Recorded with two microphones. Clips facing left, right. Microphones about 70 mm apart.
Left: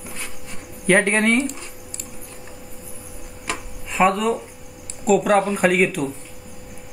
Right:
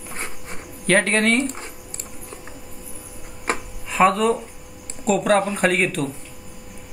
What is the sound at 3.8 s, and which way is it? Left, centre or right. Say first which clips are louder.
Speech: right 1 dB; centre.